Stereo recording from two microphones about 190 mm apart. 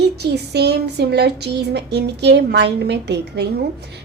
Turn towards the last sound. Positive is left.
turn(degrees=-60)  # may be behind; listen again after turning